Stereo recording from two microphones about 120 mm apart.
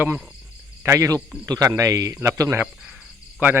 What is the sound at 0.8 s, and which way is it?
Speech, 25° right (ahead or behind).